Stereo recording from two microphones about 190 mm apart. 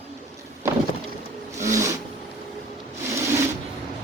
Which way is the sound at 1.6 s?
15° right (ahead or behind).